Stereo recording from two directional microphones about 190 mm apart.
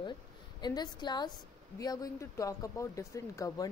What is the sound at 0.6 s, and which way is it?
A woman's voice, 20° left (ahead or behind).